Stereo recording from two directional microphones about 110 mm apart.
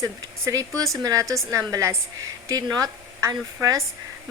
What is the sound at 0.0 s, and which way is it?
A woman's voice, 30° right (ahead or behind).